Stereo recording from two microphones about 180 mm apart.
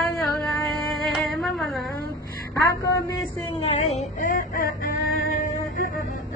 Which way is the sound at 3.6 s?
35° left (ahead or behind).